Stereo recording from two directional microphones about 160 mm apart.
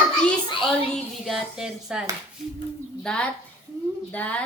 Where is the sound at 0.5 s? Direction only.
Centre (ahead or behind).